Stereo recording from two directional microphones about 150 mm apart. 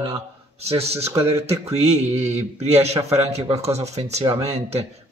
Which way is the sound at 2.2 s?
45° right (ahead or behind).